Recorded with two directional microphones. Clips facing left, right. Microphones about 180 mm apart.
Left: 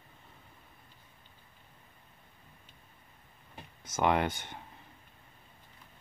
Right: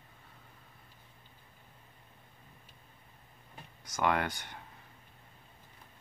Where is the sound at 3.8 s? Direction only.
20° left (ahead or behind).